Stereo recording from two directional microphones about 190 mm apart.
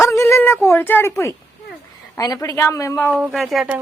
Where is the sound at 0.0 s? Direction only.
15° left (ahead or behind).